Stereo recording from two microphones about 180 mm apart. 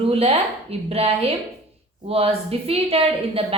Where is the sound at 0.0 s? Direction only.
35° right (ahead or behind).